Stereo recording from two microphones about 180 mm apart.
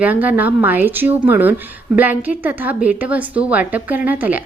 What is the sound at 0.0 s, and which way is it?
A woman's voice, 10° right (ahead or behind).